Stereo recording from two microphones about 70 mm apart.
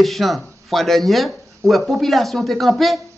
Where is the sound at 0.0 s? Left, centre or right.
Centre.